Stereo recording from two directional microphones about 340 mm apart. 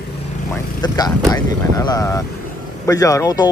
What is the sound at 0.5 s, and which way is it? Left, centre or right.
Vehicle, centre.